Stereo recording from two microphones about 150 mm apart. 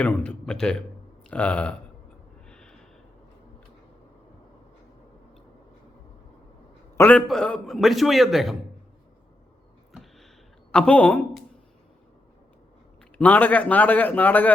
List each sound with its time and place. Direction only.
0.0 s a man's voice: 10° left (ahead or behind)
2.5 s snort: 5° left (ahead or behind)
6.9 s a man's voice: 15° left (ahead or behind)
7.2 s a man's voice: 5° left (ahead or behind)
9.9 s a sound: centre (ahead or behind)
10.7 s a man's voice: 5° left (ahead or behind)
13.1 s a man's voice: 10° left (ahead or behind)